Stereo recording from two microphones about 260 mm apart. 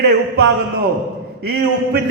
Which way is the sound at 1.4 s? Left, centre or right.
Right.